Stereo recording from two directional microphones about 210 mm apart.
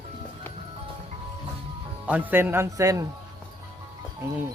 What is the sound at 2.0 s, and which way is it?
A man's voice, 10° right (ahead or behind).